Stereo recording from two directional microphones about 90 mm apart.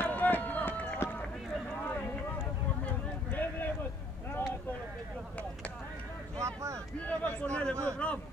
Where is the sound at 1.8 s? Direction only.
20° left (ahead or behind).